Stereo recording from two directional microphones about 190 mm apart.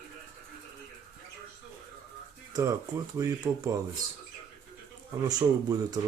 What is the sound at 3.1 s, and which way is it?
Speech, 20° right (ahead or behind).